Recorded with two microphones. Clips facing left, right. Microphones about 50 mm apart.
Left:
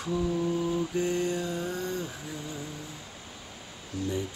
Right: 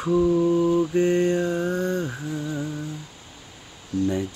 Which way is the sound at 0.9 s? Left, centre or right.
Right.